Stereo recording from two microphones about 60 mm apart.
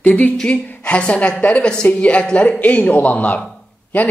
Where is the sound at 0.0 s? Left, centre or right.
Left.